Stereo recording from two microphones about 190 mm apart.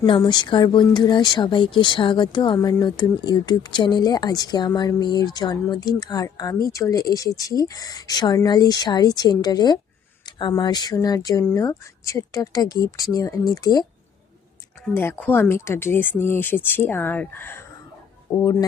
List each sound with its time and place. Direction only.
0.0 s speech: 25° left (ahead or behind)
14.8 s speech: 10° left (ahead or behind)